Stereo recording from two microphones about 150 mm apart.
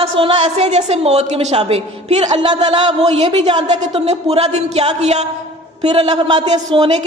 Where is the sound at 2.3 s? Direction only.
30° right (ahead or behind).